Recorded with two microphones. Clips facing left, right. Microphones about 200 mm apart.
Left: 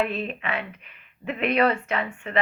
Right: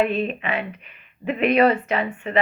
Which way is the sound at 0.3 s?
25° right (ahead or behind).